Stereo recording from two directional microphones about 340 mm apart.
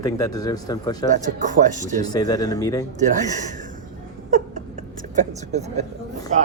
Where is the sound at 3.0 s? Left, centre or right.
Right.